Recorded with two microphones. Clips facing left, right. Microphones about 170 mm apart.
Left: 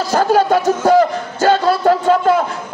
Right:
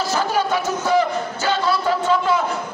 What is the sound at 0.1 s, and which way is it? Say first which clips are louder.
Music: left 10 dB; 50° left (ahead or behind).